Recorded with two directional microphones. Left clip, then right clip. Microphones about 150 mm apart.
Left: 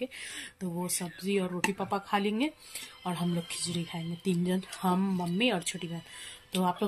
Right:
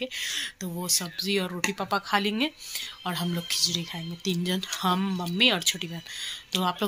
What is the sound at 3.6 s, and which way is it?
Speech, 10° left (ahead or behind).